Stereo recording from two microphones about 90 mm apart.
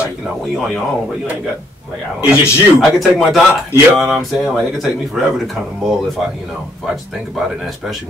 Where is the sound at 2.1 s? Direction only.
15° right (ahead or behind).